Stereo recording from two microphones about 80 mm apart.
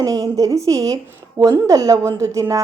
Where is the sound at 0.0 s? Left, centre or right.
Right.